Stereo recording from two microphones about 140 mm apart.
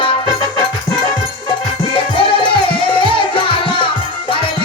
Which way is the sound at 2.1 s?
35° left (ahead or behind).